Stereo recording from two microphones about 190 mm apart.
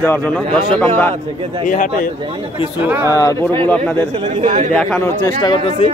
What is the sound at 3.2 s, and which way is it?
Speech, 15° left (ahead or behind).